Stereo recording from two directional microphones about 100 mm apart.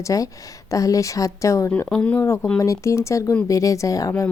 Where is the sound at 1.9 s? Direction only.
10° left (ahead or behind).